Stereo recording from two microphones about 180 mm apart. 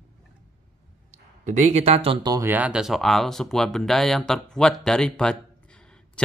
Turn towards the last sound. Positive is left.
turn(degrees=5)  # may be behind; listen again after turning